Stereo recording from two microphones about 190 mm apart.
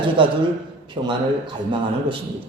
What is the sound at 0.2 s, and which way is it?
Speech, 25° right (ahead or behind).